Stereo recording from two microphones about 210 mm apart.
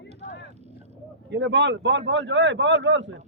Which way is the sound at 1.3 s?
60° right (ahead or behind).